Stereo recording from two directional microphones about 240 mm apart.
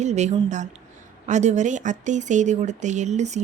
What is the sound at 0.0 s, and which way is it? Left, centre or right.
Speech, right.